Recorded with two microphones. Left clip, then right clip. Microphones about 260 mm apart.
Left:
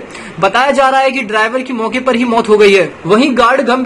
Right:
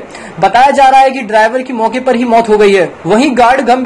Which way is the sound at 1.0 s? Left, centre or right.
Centre.